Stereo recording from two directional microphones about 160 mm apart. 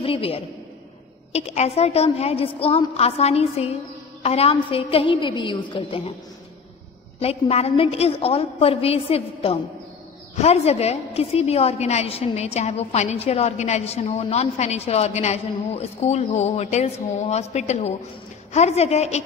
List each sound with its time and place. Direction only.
0.0 s a woman's voice: 35° left (ahead or behind)
7.2 s a woman's voice: 40° left (ahead or behind)